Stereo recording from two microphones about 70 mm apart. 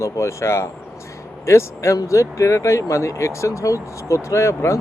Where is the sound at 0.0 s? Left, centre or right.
Left.